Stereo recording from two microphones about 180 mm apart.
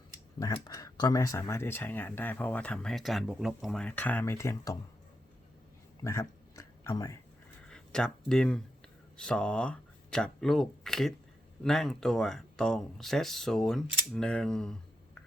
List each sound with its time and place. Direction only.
0.3 s speech: 20° left (ahead or behind)
6.0 s a sound: 20° left (ahead or behind)
7.7 s speech: 5° left (ahead or behind)